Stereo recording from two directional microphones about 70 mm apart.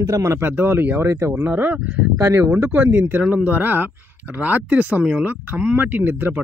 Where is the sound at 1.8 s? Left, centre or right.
Centre.